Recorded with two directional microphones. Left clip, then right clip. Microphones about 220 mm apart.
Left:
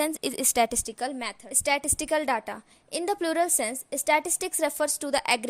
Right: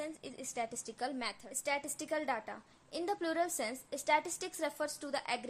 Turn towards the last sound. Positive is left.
turn(degrees=40)  # may be behind; listen again after turning